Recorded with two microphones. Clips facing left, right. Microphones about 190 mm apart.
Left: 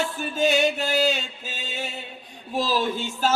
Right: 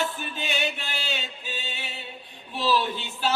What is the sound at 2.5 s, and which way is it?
Speech, 40° left (ahead or behind).